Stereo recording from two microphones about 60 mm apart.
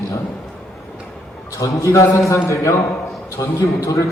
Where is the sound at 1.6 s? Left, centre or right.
Left.